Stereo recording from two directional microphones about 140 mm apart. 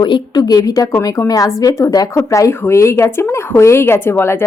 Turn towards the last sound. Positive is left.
turn(degrees=15)  # may be behind; listen again after turning